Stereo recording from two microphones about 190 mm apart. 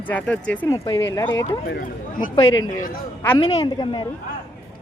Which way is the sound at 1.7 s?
55° left (ahead or behind).